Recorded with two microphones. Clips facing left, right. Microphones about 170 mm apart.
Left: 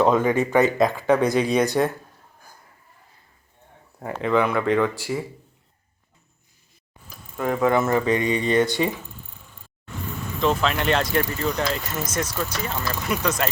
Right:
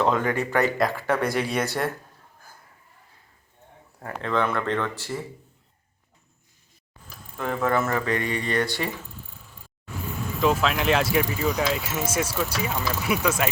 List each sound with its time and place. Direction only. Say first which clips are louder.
0.0 s speech: left 4 dB; 20° left (ahead or behind)
4.0 s speech: left 4 dB; 10° left (ahead or behind)
7.3 s speech: left 4 dB; 10° left (ahead or behind)
9.1 s vehicle: even; centre (ahead or behind)
10.4 s speech: even; 5° right (ahead or behind)